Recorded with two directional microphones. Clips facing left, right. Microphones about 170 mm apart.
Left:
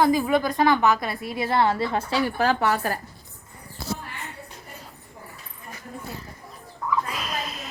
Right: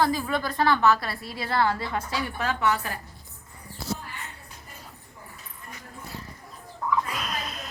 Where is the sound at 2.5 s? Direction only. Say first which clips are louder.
Left 3 dB; 65° left (ahead or behind).